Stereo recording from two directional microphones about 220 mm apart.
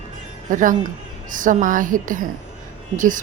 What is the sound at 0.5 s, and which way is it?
Speech, 35° right (ahead or behind).